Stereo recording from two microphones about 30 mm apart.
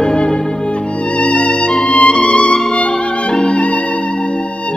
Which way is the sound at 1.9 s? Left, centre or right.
Left.